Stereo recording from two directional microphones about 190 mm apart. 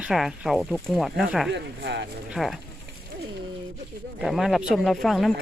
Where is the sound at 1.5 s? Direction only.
65° right (ahead or behind).